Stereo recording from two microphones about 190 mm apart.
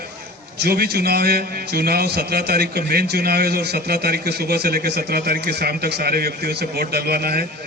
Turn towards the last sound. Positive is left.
turn(degrees=-55)  # may be behind; listen again after turning